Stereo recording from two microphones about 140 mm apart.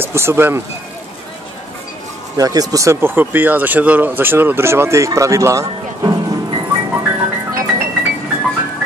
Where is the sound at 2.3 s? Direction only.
25° right (ahead or behind).